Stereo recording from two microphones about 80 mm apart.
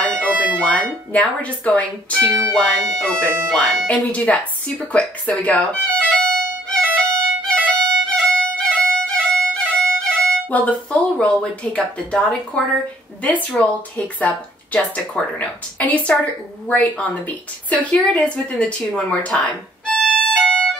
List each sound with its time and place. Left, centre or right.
0.0 s bagpipes: centre
0.6 s speech: centre
6.7 s violin: centre
10.5 s speech: centre
20.0 s music: centre